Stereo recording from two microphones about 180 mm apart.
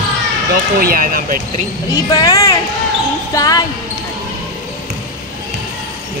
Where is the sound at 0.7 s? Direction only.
55° right (ahead or behind).